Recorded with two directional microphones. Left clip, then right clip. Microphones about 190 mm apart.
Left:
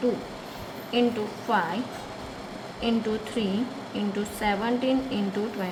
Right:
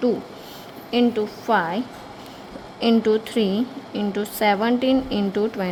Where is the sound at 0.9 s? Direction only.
45° right (ahead or behind).